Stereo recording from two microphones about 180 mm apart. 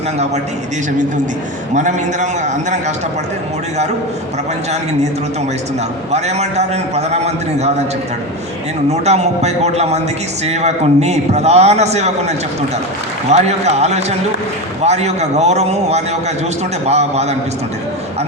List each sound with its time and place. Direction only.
1.7 s a man's voice: 40° right (ahead or behind)
6.1 s a man's voice: 35° right (ahead or behind)
8.9 s a man's voice: 40° right (ahead or behind)
13.3 s a man's voice: 40° right (ahead or behind)